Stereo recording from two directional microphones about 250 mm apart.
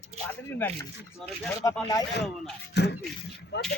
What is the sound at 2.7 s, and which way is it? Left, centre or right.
Speech, left.